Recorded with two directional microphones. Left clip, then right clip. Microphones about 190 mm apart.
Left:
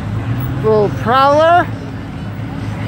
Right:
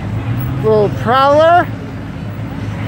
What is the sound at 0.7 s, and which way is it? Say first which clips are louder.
Speech: even; centre (ahead or behind).